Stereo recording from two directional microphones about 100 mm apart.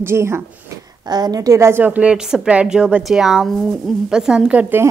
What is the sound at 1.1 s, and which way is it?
Speech, 40° right (ahead or behind).